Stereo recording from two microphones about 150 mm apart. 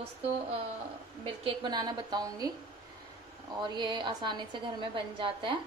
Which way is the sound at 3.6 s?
30° right (ahead or behind).